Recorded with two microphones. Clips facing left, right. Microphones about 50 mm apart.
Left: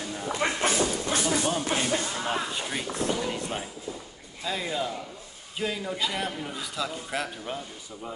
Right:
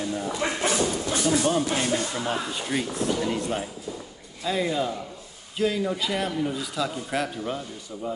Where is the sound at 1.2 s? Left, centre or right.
Centre.